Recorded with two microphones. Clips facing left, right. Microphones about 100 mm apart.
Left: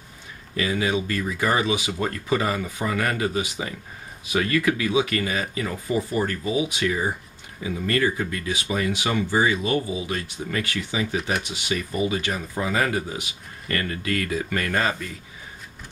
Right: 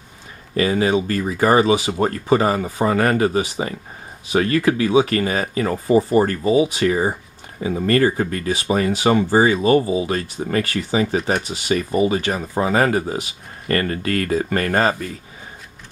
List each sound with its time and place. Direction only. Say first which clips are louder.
0.6 s speech: right 6 dB; 35° right (ahead or behind)